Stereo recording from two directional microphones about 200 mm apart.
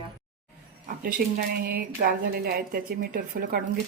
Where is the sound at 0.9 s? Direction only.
45° right (ahead or behind).